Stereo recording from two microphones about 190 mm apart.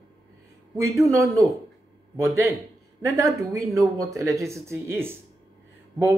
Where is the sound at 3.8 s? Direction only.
15° right (ahead or behind).